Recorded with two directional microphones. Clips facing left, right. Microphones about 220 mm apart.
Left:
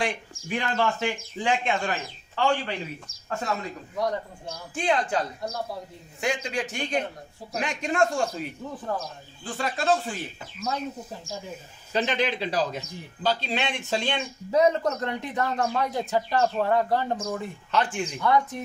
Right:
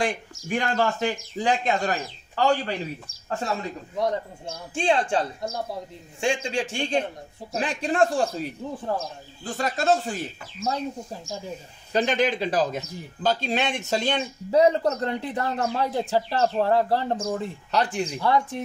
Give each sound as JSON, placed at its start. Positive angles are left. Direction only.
{"t": 0.0, "sound": "a man's voice", "side_deg": -45}
{"t": 3.9, "sound": "a man's voice", "side_deg": -25}
{"t": 9.6, "sound": "speech", "side_deg": -45}
{"t": 11.9, "sound": "a man's voice", "side_deg": -45}